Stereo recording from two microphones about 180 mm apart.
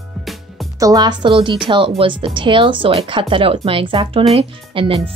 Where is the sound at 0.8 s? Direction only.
20° right (ahead or behind).